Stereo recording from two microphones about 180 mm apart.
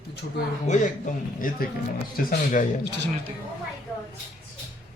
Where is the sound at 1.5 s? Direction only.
50° left (ahead or behind).